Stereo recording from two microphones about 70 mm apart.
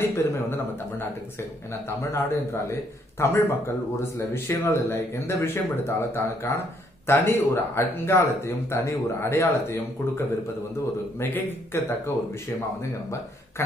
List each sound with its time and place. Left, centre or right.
0.0 s speech: left